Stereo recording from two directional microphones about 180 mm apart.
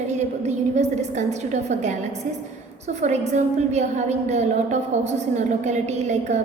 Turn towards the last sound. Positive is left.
turn(degrees=-40)  # may be behind; listen again after turning